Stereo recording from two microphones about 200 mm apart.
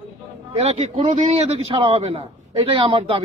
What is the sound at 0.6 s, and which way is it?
A man's voice, 35° right (ahead or behind).